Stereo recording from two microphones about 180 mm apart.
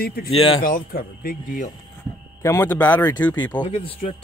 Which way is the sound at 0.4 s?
30° left (ahead or behind).